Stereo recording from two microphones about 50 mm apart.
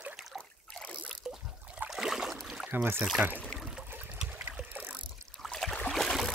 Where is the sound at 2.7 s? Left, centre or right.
Right.